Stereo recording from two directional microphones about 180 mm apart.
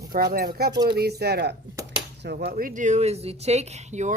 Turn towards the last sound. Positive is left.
turn(degrees=-40)  # may be behind; listen again after turning